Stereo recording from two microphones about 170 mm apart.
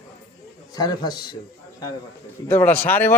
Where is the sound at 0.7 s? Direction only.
25° left (ahead or behind).